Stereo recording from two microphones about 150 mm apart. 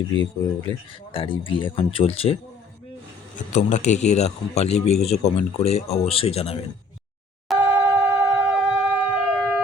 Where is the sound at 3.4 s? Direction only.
55° left (ahead or behind).